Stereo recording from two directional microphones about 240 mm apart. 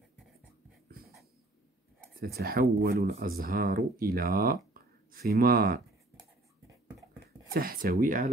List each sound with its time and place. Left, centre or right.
2.1 s speech: right
7.5 s speech: right